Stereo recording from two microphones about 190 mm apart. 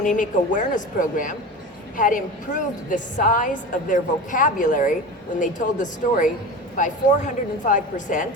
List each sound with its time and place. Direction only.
0.0 s a woman's voice: 45° left (ahead or behind)